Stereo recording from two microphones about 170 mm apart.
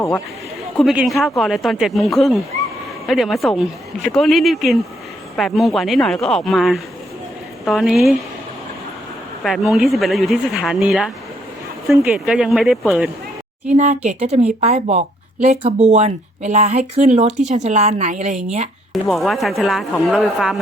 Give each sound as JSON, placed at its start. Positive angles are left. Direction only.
{"t": 0.8, "sound": "speech", "side_deg": 0}
{"t": 9.4, "sound": "speech", "side_deg": 0}
{"t": 13.7, "sound": "speech", "side_deg": -40}
{"t": 19.0, "sound": "speech", "side_deg": 0}